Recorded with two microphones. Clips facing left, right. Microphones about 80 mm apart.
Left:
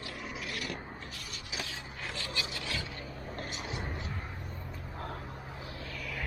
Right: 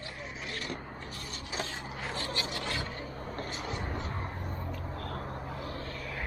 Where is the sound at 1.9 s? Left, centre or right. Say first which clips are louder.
Right 3 dB; right.